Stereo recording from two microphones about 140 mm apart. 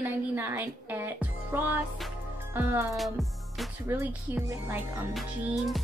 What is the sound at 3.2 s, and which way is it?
Music, centre (ahead or behind).